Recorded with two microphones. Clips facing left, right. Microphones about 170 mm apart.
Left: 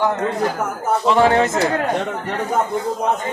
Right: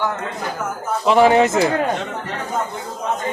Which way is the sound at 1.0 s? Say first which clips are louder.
Right 3 dB; 15° right (ahead or behind).